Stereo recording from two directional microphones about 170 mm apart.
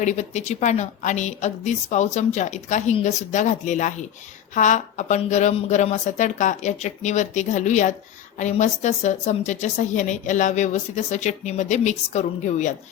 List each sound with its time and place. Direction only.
0.0 s a woman's voice: 45° left (ahead or behind)